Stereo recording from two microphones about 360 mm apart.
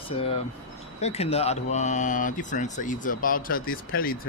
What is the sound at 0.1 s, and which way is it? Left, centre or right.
Speech, centre.